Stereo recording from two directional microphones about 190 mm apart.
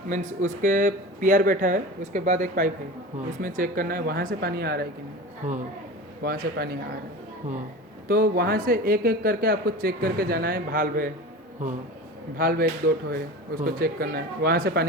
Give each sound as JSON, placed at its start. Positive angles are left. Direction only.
{"t": 0.1, "sound": "speech", "side_deg": -40}
{"t": 5.4, "sound": "speech", "side_deg": -40}
{"t": 6.2, "sound": "speech", "side_deg": -50}
{"t": 8.0, "sound": "speech", "side_deg": -50}
{"t": 12.4, "sound": "speech", "side_deg": -50}